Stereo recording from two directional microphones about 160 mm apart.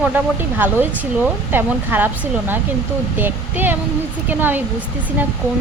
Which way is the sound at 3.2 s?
10° right (ahead or behind).